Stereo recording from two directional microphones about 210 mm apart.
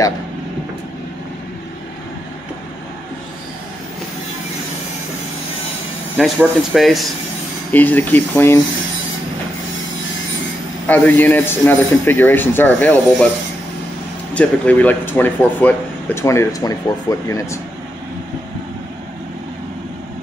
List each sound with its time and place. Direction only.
6.1 s speech: centre (ahead or behind)
10.9 s speech: 10° left (ahead or behind)
14.3 s speech: 5° left (ahead or behind)